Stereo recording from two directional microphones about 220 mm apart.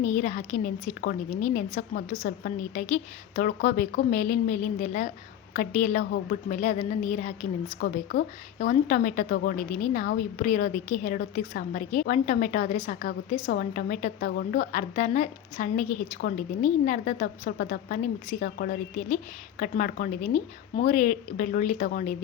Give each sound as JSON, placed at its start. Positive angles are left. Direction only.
{"t": 0.0, "sound": "speech", "side_deg": 35}
{"t": 7.8, "sound": "speech", "side_deg": 45}